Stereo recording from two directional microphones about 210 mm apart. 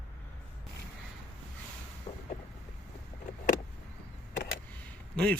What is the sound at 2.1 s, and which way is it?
Vehicle, 30° left (ahead or behind).